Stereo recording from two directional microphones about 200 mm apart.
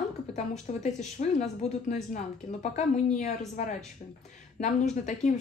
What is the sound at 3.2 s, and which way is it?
Speech, 35° left (ahead or behind).